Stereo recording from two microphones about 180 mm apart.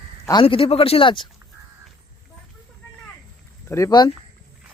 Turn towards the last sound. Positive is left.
turn(degrees=25)  # may be behind; listen again after turning